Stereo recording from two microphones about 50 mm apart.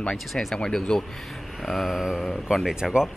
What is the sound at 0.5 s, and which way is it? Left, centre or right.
Speech, centre.